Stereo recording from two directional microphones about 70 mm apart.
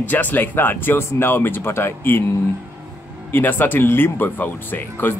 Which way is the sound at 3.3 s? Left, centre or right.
Left.